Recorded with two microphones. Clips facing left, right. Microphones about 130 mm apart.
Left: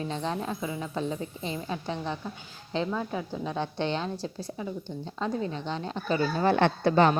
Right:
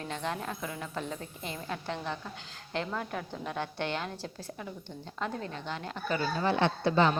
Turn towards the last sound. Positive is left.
turn(degrees=50)  # may be behind; listen again after turning